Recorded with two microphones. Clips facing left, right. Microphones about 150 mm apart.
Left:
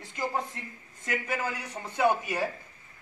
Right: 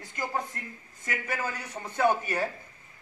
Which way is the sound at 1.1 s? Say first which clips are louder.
Left 1 dB; 15° left (ahead or behind).